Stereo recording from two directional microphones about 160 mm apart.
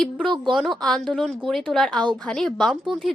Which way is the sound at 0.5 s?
Centre (ahead or behind).